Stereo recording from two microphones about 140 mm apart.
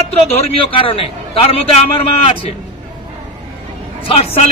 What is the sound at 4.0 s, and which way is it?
Speech, 45° left (ahead or behind).